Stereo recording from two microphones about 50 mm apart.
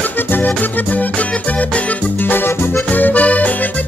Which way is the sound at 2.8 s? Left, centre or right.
Left.